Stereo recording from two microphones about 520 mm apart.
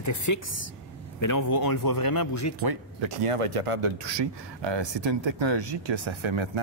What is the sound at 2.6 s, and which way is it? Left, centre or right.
Speech, right.